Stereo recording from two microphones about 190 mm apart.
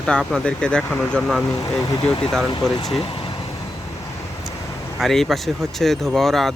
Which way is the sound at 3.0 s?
25° left (ahead or behind).